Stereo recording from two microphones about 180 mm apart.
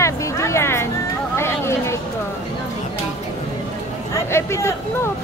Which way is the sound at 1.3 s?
15° left (ahead or behind).